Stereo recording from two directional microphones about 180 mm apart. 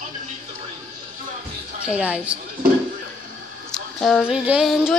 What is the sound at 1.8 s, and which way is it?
Speech, 5° right (ahead or behind).